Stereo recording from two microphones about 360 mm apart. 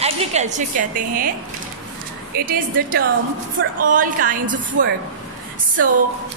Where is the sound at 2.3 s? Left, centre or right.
Right.